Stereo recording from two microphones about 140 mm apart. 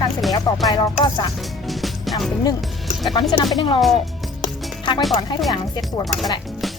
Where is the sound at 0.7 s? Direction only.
30° left (ahead or behind).